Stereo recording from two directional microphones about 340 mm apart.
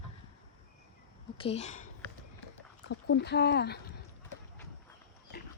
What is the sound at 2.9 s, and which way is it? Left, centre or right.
Speech, left.